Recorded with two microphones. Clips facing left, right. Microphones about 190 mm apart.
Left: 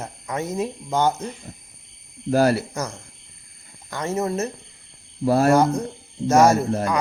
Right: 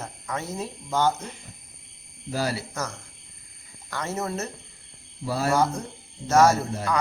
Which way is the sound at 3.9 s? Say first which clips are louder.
Left 5 dB; 15° left (ahead or behind).